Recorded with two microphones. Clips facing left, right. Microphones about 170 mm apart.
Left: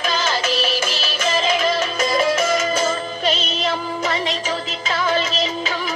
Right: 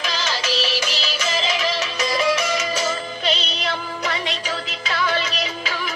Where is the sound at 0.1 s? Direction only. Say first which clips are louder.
Left 4 dB; 50° left (ahead or behind).